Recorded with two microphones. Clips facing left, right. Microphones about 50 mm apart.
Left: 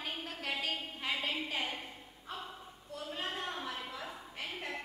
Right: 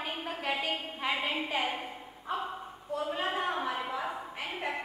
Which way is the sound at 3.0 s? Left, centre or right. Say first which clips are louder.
Right 7 dB; centre.